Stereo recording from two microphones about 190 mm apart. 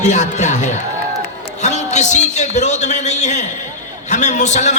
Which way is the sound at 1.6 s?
35° left (ahead or behind).